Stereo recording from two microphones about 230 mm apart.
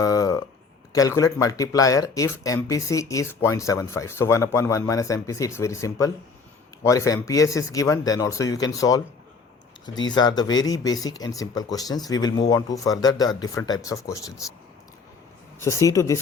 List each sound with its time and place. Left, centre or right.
0.0 s a sound: centre
0.9 s speech: centre
10.1 s speech: centre
15.5 s speech: centre